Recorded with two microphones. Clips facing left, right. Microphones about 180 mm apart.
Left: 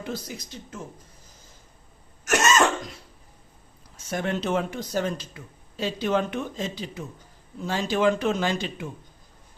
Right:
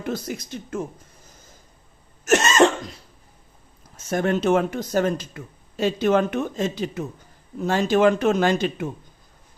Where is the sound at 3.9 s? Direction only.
50° right (ahead or behind).